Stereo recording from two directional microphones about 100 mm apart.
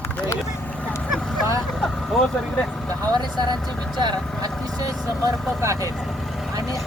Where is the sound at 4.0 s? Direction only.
50° right (ahead or behind).